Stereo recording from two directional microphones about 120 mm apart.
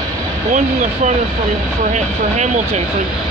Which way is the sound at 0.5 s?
90° right.